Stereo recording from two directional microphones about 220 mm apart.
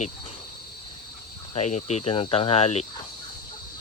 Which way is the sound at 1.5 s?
30° left (ahead or behind).